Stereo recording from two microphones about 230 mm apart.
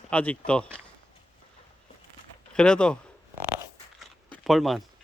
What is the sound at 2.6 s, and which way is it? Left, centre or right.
Speech, centre.